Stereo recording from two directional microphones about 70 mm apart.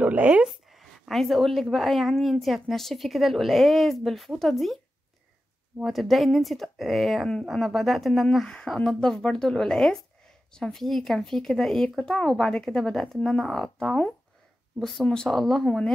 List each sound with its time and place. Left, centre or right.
0.0 s speech: centre
0.5 s a woman's voice: centre
5.9 s a woman's voice: centre